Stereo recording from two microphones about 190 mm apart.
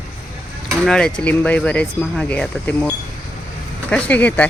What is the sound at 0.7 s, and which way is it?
Speech, 5° left (ahead or behind).